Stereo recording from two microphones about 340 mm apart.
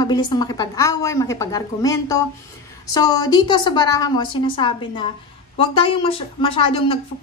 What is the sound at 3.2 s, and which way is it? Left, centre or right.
A woman's voice, centre.